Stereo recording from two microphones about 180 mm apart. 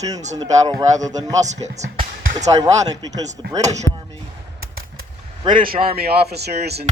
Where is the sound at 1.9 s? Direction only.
30° right (ahead or behind).